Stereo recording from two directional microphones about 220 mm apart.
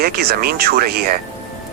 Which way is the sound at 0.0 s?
45° right (ahead or behind).